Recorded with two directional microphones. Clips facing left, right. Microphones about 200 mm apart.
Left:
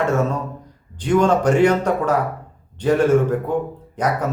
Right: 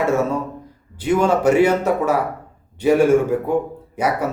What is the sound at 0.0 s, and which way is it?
A man's voice, 10° right (ahead or behind).